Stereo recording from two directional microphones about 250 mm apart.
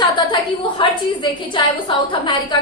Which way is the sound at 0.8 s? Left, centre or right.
Centre.